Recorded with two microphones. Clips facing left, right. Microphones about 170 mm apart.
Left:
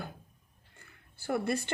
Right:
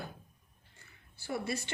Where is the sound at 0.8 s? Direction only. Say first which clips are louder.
Left 3 dB; 55° left (ahead or behind).